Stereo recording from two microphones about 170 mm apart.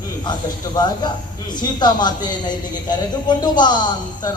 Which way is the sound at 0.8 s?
25° left (ahead or behind).